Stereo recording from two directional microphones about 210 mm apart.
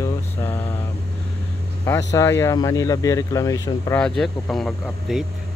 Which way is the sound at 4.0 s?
Centre (ahead or behind).